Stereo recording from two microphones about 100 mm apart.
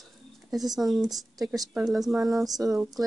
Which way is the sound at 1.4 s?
40° right (ahead or behind).